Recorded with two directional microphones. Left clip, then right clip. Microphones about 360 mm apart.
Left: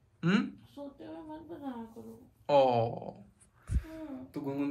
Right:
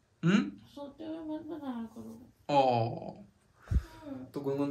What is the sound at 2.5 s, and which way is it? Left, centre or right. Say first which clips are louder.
Speech: left 1 dB; centre.